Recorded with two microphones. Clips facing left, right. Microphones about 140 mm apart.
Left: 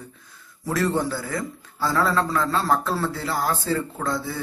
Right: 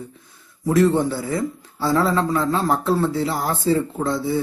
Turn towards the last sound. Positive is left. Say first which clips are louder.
# right 5 dB
turn(degrees=-25)  # may be behind; listen again after turning